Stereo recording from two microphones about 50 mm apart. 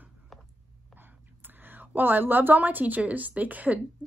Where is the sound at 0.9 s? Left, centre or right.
Right.